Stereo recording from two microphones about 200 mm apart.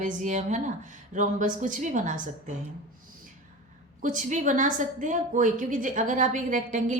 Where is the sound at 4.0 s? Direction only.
40° right (ahead or behind).